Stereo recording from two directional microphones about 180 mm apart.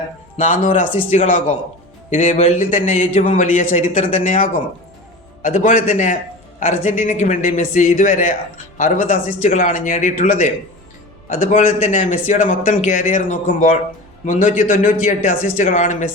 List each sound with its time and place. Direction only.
0.6 s speech: 45° left (ahead or behind)